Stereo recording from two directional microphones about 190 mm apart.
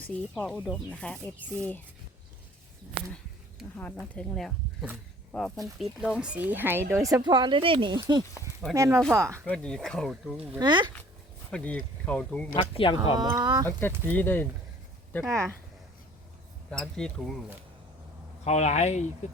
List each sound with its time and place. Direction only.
0.0 s speech: 5° left (ahead or behind)
4.1 s speech: 5° left (ahead or behind)
6.1 s speech: 5° right (ahead or behind)
9.4 s speech: 5° left (ahead or behind)
10.6 s speech: 25° right (ahead or behind)
11.5 s speech: 5° left (ahead or behind)
12.5 s speech: 25° left (ahead or behind)
13.1 s speech: 20° right (ahead or behind)
13.7 s speech: 10° left (ahead or behind)
16.7 s speech: 5° left (ahead or behind)
18.4 s speech: 35° left (ahead or behind)